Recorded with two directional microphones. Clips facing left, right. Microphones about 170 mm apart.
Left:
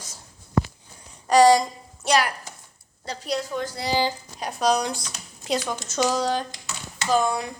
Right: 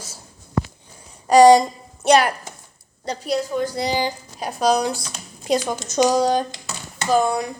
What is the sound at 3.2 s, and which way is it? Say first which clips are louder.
Speech: right 5 dB; 5° right (ahead or behind).